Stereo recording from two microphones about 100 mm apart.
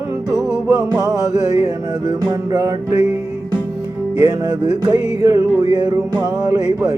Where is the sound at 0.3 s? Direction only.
5° right (ahead or behind).